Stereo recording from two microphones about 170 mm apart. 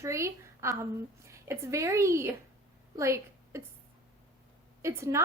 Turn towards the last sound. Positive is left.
turn(degrees=-15)  # may be behind; listen again after turning